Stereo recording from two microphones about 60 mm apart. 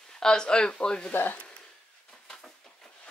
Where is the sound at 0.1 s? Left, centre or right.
Centre.